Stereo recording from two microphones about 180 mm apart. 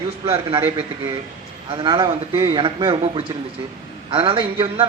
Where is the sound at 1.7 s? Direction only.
25° right (ahead or behind).